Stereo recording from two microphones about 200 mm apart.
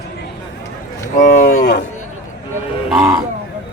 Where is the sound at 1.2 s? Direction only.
40° left (ahead or behind).